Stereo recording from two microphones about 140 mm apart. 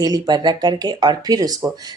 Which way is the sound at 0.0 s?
30° right (ahead or behind).